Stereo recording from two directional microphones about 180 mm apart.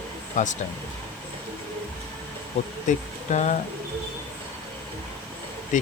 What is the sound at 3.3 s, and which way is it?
Speech, 40° left (ahead or behind).